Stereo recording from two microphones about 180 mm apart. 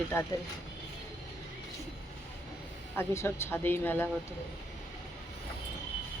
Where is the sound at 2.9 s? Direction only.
15° left (ahead or behind).